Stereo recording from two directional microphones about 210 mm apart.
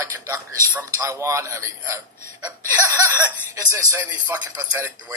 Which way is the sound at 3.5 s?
15° right (ahead or behind).